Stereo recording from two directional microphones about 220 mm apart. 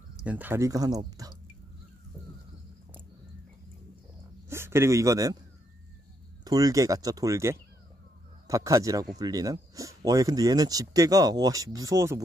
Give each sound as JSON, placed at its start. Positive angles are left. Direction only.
{"t": 0.2, "sound": "speech", "side_deg": -5}
{"t": 4.5, "sound": "speech", "side_deg": -10}
{"t": 6.4, "sound": "speech", "side_deg": -15}